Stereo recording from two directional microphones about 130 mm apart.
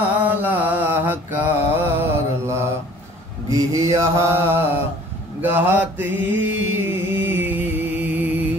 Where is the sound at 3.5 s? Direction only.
25° right (ahead or behind).